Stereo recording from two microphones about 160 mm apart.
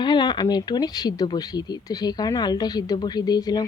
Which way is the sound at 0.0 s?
30° left (ahead or behind).